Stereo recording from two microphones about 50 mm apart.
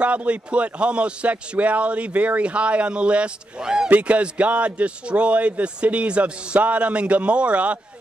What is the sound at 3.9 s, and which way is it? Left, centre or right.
A man's voice, right.